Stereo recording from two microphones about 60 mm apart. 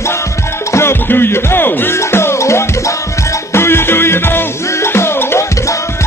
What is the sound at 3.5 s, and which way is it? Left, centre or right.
Music, left.